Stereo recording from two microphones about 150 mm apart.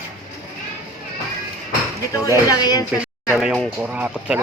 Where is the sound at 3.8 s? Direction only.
10° right (ahead or behind).